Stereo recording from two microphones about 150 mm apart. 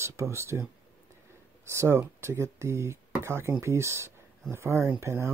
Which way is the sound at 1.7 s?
20° right (ahead or behind).